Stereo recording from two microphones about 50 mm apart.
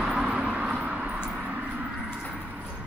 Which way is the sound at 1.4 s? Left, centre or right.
Centre.